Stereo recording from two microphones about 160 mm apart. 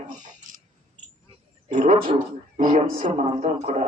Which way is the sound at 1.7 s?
55° right (ahead or behind).